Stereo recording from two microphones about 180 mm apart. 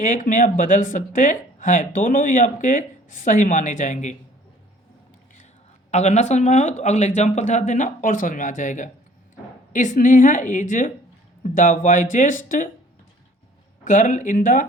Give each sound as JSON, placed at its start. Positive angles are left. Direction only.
{"t": 0.0, "sound": "speech", "side_deg": 45}
{"t": 5.9, "sound": "speech", "side_deg": 40}
{"t": 13.8, "sound": "speech", "side_deg": 45}